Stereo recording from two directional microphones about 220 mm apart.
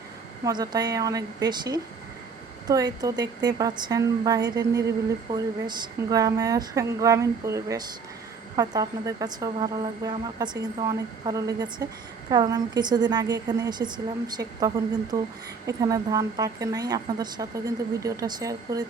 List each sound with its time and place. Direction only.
0.4 s a woman's voice: 15° right (ahead or behind)